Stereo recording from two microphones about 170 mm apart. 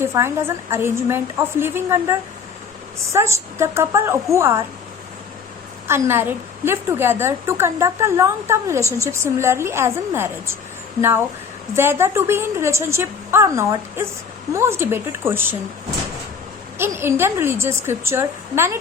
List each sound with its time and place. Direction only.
0.0 s a woman's voice: 15° right (ahead or behind)
5.9 s a woman's voice: 15° right (ahead or behind)
11.7 s a woman's voice: 15° right (ahead or behind)
16.7 s a woman's voice: 15° right (ahead or behind)